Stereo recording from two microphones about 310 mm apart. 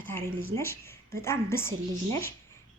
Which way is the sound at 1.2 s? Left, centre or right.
Centre.